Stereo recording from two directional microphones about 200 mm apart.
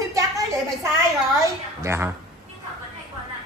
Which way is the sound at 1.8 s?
15° right (ahead or behind).